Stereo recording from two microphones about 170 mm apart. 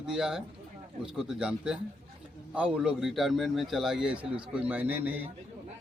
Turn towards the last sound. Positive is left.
turn(degrees=-10)  # may be behind; listen again after turning